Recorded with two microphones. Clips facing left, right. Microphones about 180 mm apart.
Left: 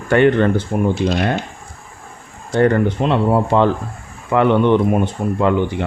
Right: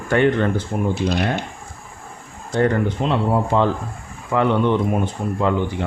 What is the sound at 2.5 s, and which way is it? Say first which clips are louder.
Speech: left 4 dB; 65° left (ahead or behind).